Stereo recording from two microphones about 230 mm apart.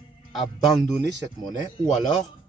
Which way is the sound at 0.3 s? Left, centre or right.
Centre.